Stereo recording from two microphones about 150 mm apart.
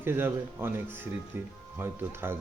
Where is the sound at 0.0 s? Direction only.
15° right (ahead or behind).